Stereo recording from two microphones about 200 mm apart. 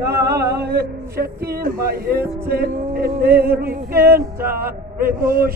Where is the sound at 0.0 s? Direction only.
55° right (ahead or behind).